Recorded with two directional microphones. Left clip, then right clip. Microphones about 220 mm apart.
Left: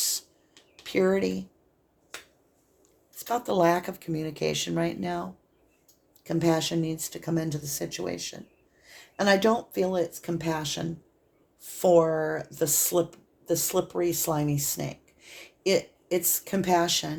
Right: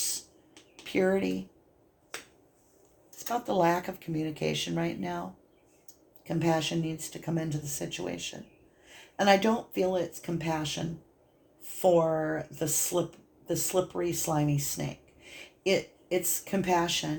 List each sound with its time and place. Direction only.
0.9 s speech: 40° left (ahead or behind)
3.2 s speech: 40° left (ahead or behind)